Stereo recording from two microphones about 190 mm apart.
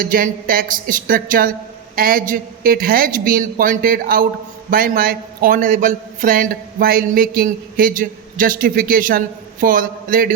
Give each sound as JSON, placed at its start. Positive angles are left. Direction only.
{"t": 0.0, "sound": "a man's voice", "side_deg": -45}